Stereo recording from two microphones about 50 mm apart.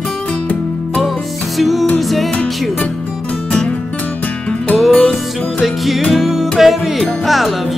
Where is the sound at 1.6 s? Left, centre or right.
Centre.